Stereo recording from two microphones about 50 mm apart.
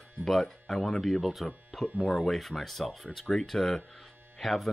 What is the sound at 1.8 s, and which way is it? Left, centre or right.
Speech, left.